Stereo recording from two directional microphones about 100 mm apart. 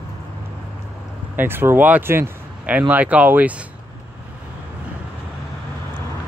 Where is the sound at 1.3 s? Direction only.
20° right (ahead or behind).